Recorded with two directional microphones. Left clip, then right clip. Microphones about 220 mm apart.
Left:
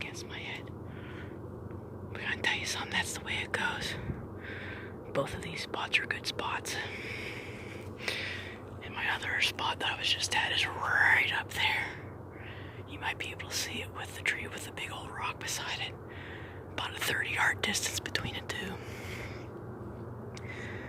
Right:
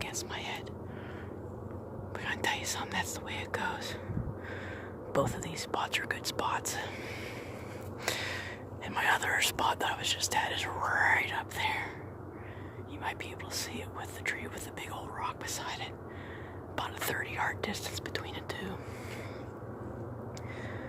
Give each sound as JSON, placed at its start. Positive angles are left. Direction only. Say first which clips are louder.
{"t": 0.0, "sound": "whispering", "louder": "right 2 dB", "side_deg": -25}
{"t": 2.1, "sound": "speech", "louder": "left 1 dB", "side_deg": -15}
{"t": 5.1, "sound": "speech", "louder": "right 2 dB", "side_deg": -15}
{"t": 8.0, "sound": "a sound", "louder": "right 1 dB", "side_deg": -25}
{"t": 9.0, "sound": "speech", "louder": "right 3 dB", "side_deg": -25}
{"t": 13.0, "sound": "speech", "louder": "left 2 dB", "side_deg": -10}